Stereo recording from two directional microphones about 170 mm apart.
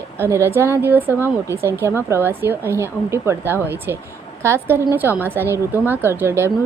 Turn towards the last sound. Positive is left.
turn(degrees=-15)  # may be behind; listen again after turning